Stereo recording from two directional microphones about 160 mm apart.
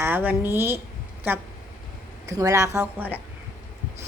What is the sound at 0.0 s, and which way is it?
A woman's voice, 10° right (ahead or behind).